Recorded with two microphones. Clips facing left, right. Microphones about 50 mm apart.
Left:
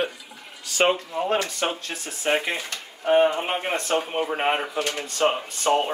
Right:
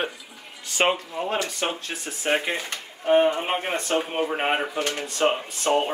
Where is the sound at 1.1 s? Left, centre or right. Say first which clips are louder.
Left 3 dB; centre.